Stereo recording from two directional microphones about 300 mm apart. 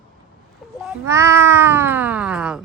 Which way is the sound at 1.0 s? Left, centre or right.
Centre.